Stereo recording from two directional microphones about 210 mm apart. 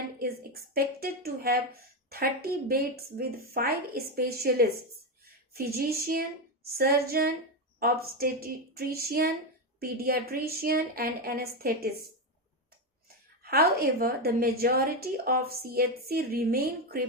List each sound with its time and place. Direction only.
0.2 s a woman's voice: 45° right (ahead or behind)
13.4 s a woman's voice: 45° right (ahead or behind)